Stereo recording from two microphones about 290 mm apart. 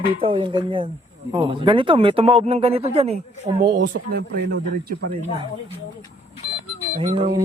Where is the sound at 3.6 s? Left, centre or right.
Right.